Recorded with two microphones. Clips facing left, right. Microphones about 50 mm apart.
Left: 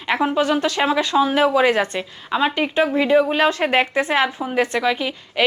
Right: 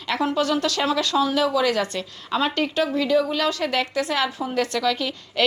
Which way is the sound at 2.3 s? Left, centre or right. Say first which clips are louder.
Left 3 dB; centre.